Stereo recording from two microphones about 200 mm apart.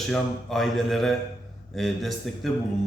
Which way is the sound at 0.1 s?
Centre (ahead or behind).